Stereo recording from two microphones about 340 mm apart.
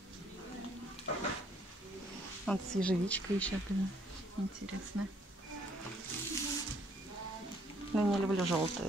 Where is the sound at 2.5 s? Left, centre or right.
Centre.